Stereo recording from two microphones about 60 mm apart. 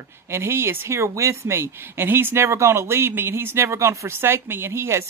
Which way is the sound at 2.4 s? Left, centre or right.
Right.